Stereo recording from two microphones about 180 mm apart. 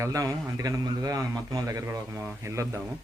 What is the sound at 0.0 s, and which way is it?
A man's voice, 20° right (ahead or behind).